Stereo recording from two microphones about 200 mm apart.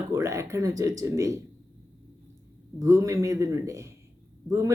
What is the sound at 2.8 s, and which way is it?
Speech, 15° right (ahead or behind).